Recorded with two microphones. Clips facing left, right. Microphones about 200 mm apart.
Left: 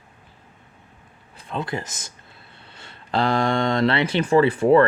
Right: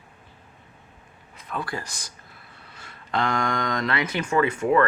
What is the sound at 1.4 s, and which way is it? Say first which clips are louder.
Speech: left 3 dB; 25° left (ahead or behind).